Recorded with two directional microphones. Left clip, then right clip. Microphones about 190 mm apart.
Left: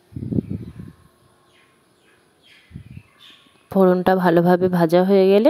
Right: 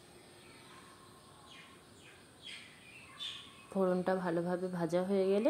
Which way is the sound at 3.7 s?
40° left (ahead or behind).